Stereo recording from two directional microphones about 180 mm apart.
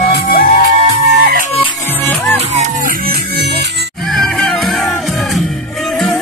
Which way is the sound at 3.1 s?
65° right (ahead or behind).